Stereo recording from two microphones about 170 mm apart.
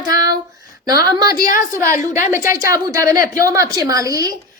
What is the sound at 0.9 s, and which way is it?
A woman's voice, 20° right (ahead or behind).